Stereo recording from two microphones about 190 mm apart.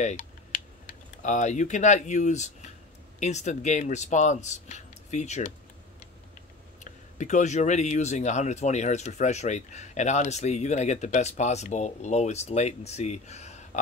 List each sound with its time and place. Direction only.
0.0 s speech: 40° left (ahead or behind)
6.8 s speech: 40° left (ahead or behind)